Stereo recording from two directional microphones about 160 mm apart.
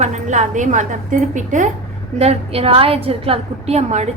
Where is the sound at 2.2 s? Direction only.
40° right (ahead or behind).